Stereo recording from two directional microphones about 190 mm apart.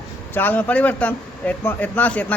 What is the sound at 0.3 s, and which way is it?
Speech, 10° left (ahead or behind).